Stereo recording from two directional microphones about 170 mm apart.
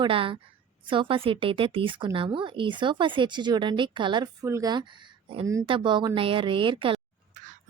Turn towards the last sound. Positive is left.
turn(degrees=-30)  # may be behind; listen again after turning